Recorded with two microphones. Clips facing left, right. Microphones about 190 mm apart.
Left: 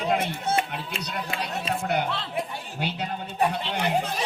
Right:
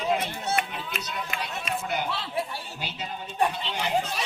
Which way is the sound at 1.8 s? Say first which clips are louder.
Left 3 dB; 60° left (ahead or behind).